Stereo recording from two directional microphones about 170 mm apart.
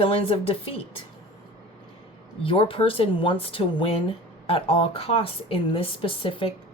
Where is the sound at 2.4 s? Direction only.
30° left (ahead or behind).